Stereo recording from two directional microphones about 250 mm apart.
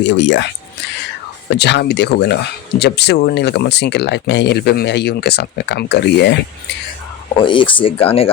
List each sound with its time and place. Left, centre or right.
0.0 s speech: left
7.4 s speech: centre